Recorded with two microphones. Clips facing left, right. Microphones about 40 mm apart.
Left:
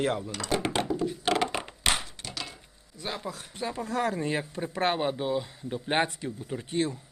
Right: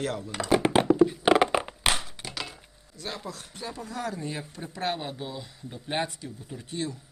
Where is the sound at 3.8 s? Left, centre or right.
Left.